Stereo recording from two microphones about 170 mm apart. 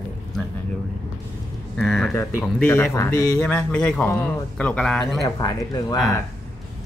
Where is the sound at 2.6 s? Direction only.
10° left (ahead or behind).